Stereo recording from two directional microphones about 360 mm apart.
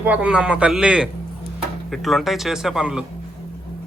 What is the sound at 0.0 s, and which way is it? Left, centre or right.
Speech, centre.